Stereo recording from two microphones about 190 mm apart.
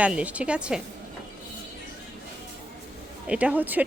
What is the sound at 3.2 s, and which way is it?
Speech, 5° right (ahead or behind).